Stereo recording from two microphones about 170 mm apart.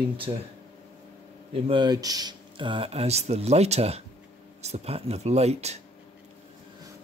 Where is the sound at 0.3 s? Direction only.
30° right (ahead or behind).